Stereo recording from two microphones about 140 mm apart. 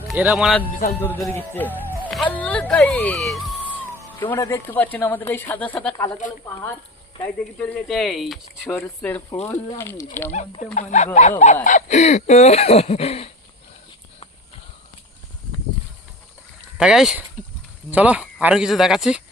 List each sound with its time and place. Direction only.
0.2 s speech: 5° right (ahead or behind)
0.9 s speech: 15° left (ahead or behind)
4.2 s speech: 20° left (ahead or behind)
7.1 s speech: 35° left (ahead or behind)
7.6 s speech: 5° left (ahead or behind)
8.6 s speech: 15° left (ahead or behind)
10.8 s speech: 60° left (ahead or behind)
11.6 s a sound: 60° left (ahead or behind); by 13.3 s 45° left (ahead or behind)
16.7 s speech: 5° right (ahead or behind)